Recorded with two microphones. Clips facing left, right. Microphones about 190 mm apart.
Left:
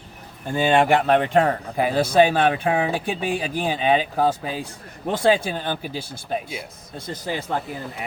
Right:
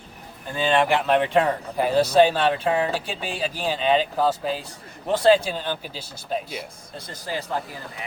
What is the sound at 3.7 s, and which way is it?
Speech, 55° left (ahead or behind).